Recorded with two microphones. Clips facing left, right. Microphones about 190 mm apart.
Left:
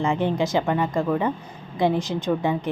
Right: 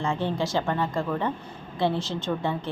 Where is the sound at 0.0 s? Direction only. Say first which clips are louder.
Left 5 dB; 20° left (ahead or behind).